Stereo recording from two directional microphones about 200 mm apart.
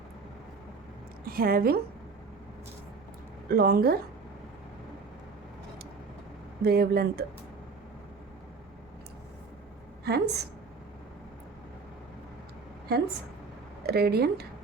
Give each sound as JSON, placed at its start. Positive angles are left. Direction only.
{"t": 1.2, "sound": "a woman's voice", "side_deg": -50}
{"t": 3.5, "sound": "speech", "side_deg": -50}
{"t": 6.6, "sound": "speech", "side_deg": -50}
{"t": 10.0, "sound": "a woman's voice", "side_deg": -55}
{"t": 12.9, "sound": "a woman's voice", "side_deg": -55}